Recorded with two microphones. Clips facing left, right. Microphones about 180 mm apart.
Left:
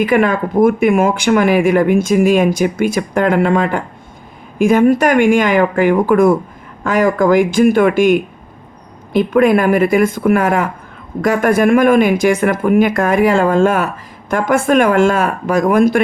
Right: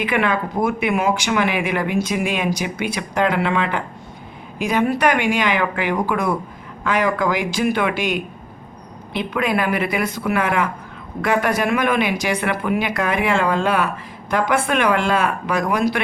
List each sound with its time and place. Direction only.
0.0 s speech: 45° left (ahead or behind)